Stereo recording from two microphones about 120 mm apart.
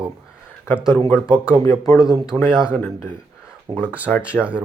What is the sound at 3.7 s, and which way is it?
Speech, 30° right (ahead or behind).